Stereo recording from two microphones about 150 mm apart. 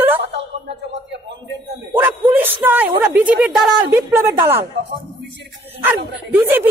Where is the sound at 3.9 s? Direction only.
15° right (ahead or behind).